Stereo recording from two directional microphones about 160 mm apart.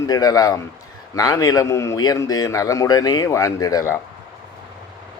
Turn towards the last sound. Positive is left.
turn(degrees=20)  # may be behind; listen again after turning